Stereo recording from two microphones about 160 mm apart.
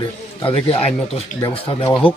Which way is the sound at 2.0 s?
35° left (ahead or behind).